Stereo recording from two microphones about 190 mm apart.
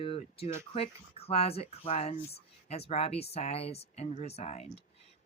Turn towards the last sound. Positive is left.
turn(degrees=35)  # may be behind; listen again after turning